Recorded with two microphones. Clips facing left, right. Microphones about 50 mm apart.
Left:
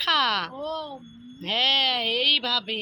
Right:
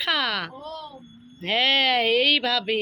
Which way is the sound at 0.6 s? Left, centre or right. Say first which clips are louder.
Left 5 dB; left.